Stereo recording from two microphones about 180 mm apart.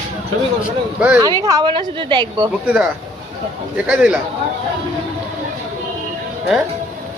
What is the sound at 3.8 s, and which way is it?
Speech, 5° right (ahead or behind).